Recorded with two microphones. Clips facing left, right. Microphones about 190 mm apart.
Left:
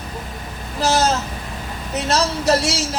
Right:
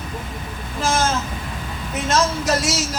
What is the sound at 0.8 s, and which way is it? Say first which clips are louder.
Speech: left 3 dB; 40° left (ahead or behind).